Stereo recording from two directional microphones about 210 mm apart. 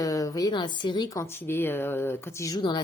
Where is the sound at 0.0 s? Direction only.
15° left (ahead or behind).